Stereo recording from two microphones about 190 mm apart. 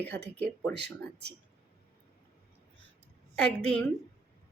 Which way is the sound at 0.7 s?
60° right (ahead or behind).